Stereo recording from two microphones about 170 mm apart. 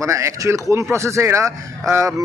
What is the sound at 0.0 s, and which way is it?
A man's voice, 15° right (ahead or behind).